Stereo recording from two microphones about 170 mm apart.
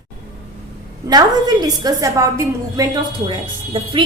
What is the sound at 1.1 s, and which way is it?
A woman's voice, 25° right (ahead or behind).